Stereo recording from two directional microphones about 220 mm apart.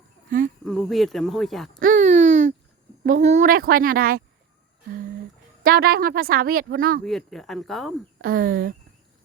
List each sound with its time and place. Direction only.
0.6 s speech: centre (ahead or behind)
1.8 s a sound: 35° right (ahead or behind)
3.0 s speech: 35° right (ahead or behind)
5.6 s speech: 45° right (ahead or behind)
7.0 s speech: centre (ahead or behind)
8.2 s speech: 40° right (ahead or behind)